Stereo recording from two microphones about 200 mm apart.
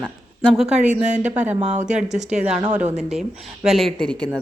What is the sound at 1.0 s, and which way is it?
Speech, 35° right (ahead or behind).